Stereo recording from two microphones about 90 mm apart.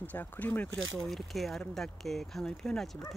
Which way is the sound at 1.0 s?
Centre (ahead or behind).